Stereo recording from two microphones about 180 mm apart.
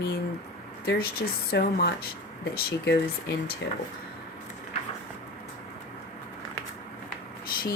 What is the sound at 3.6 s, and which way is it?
Speech, 75° left (ahead or behind).